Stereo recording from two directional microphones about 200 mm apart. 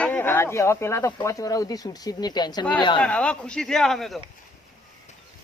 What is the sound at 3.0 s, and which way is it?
Speech, 5° left (ahead or behind).